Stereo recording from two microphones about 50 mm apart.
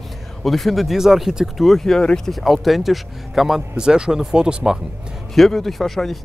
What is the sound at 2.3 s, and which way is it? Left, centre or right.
Speech, centre.